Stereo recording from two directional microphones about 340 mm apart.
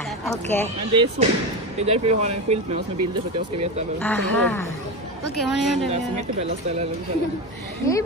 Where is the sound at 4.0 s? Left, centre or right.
Centre.